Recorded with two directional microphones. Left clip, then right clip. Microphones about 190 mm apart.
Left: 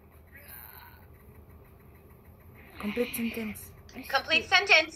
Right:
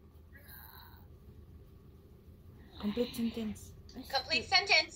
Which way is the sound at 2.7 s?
5° right (ahead or behind).